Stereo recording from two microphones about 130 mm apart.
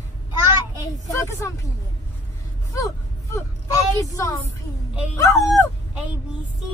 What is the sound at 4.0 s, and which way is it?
Child singing, 25° left (ahead or behind).